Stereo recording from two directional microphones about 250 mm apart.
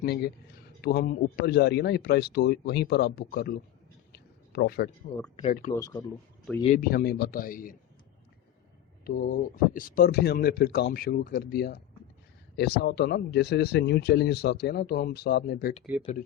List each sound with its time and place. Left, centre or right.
0.8 s speech: left
4.1 s a sound: left
5.4 s speech: left
5.7 s speech: centre
6.6 s speech: left
9.0 s speech: left
15.8 s speech: centre